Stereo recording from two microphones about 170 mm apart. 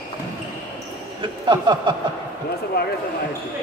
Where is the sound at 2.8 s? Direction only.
70° left (ahead or behind).